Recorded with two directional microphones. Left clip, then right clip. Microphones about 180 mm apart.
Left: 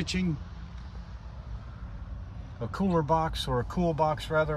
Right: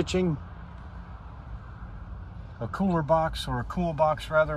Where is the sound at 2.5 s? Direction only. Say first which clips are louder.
Even; 10° left (ahead or behind).